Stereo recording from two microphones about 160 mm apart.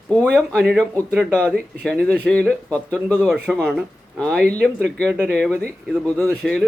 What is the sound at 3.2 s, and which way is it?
Speech, 5° right (ahead or behind).